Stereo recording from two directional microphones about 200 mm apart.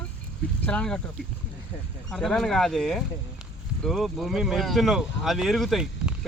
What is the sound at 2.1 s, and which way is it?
Speech, centre (ahead or behind).